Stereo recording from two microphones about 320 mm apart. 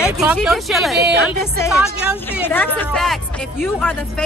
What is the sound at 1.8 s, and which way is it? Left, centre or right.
Speech, centre.